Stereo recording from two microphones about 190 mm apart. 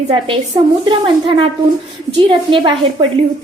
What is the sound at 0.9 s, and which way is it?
Speech, 25° right (ahead or behind).